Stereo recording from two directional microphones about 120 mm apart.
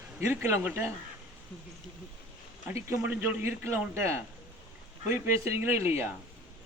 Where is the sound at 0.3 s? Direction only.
20° right (ahead or behind).